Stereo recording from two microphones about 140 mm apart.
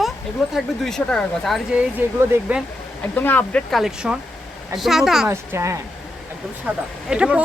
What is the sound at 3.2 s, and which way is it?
Speech, 15° left (ahead or behind).